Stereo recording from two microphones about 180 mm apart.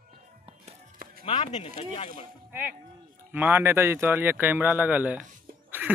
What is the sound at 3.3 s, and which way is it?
Speech, 10° right (ahead or behind).